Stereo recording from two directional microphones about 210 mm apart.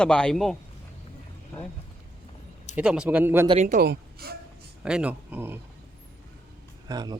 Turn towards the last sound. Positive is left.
turn(degrees=-20)  # may be behind; listen again after turning